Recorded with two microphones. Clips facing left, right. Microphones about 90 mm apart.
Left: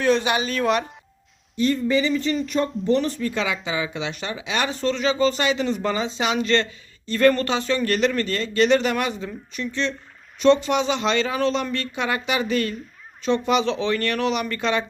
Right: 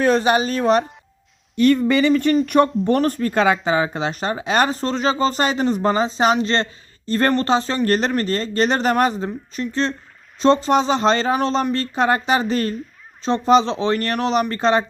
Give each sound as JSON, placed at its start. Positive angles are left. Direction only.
{"t": 0.0, "sound": "speech", "side_deg": -40}
{"t": 1.5, "sound": "speech", "side_deg": -60}